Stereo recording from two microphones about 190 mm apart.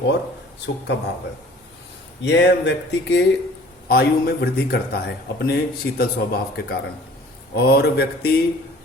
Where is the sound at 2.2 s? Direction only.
65° left (ahead or behind).